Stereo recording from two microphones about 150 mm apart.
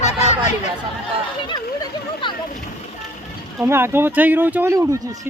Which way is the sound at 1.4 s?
35° left (ahead or behind).